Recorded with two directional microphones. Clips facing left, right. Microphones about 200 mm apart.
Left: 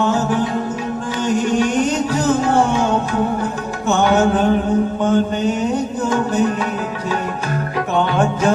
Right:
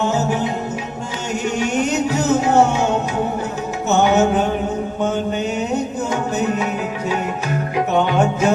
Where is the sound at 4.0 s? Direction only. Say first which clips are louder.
Even; 10° right (ahead or behind).